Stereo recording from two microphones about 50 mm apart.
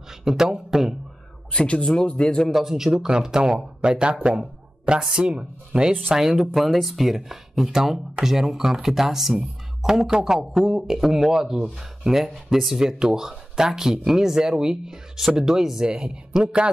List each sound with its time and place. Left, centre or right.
0.2 s speech: centre
1.5 s speech: left
2.5 s speech: centre